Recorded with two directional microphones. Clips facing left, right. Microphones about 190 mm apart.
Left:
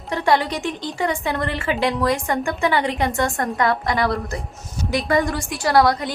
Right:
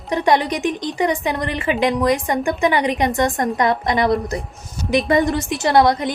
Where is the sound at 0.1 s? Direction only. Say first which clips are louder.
Right 2 dB; 20° right (ahead or behind).